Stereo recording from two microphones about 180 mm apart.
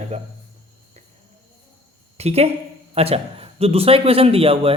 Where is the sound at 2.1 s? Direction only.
35° right (ahead or behind).